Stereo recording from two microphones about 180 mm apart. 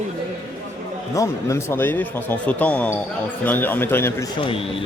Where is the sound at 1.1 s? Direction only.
15° left (ahead or behind).